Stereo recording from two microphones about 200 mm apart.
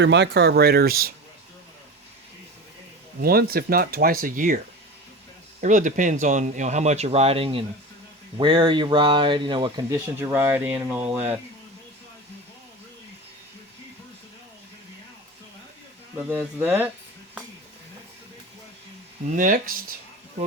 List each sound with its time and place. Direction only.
0.0 s speech: 60° right (ahead or behind)
3.2 s speech: 50° right (ahead or behind); by 11.3 s 10° right (ahead or behind)
16.3 s speech: 10° right (ahead or behind)
19.3 s speech: 40° right (ahead or behind)